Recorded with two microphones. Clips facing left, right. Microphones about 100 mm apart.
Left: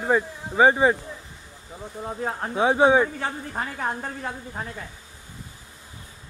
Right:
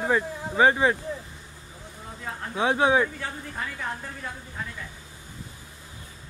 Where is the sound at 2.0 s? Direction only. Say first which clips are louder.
Left 7 dB; 45° left (ahead or behind).